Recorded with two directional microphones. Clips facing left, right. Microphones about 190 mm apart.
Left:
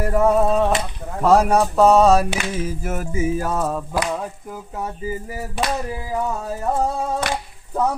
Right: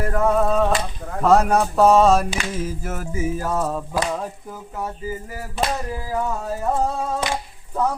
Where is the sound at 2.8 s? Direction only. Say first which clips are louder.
Left 3 dB; 15° left (ahead or behind).